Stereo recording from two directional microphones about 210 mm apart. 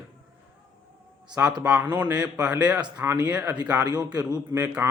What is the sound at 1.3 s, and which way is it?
A man's voice, 5° right (ahead or behind).